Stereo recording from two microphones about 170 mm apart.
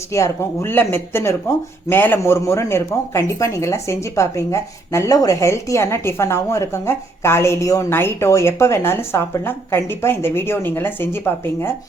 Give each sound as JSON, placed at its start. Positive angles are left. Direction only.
{"t": 0.1, "sound": "speech", "side_deg": 15}